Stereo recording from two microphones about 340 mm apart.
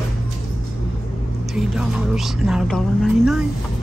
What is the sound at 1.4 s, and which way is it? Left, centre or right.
A woman's voice, centre.